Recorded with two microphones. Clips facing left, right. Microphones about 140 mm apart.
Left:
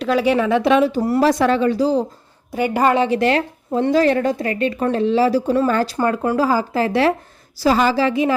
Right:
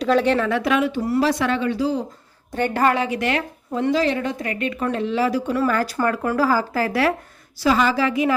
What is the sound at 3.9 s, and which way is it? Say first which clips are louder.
A woman's voice: left 6 dB; 50° left (ahead or behind).